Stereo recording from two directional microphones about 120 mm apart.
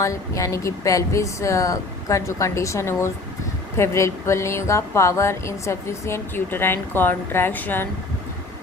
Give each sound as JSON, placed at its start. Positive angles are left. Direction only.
{"t": 0.0, "sound": "speech", "side_deg": 25}